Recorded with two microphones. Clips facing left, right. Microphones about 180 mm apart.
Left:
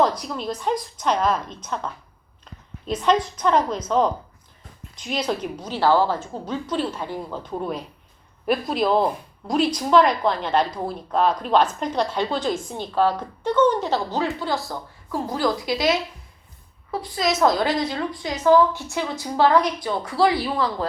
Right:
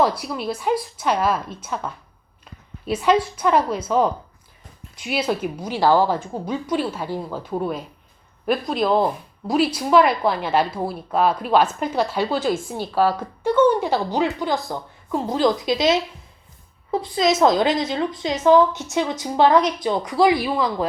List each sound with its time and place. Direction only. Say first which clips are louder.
0.0 s a woman's voice: right 1 dB; 10° right (ahead or behind)